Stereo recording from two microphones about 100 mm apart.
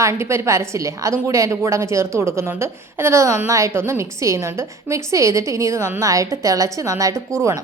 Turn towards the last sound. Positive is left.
turn(degrees=-35)  # may be behind; listen again after turning